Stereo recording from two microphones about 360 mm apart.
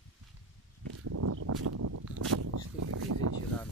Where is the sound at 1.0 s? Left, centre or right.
Right.